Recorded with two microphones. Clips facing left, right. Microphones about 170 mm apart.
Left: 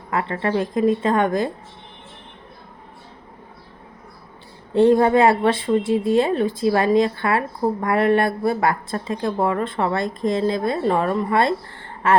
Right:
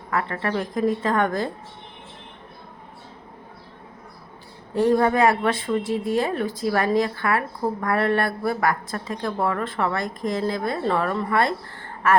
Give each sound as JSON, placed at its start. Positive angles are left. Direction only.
{"t": 0.1, "sound": "a woman's voice", "side_deg": 20}
{"t": 4.7, "sound": "a woman's voice", "side_deg": 25}